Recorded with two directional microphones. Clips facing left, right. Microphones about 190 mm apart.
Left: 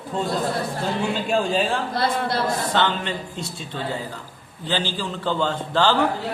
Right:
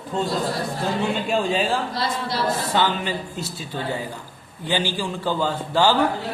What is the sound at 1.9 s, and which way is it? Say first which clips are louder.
Speech: left 3 dB; 55° left (ahead or behind).